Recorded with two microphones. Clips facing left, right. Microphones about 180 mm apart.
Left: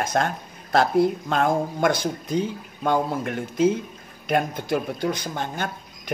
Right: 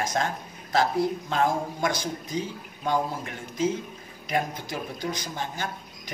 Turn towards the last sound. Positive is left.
turn(degrees=60)  # may be behind; listen again after turning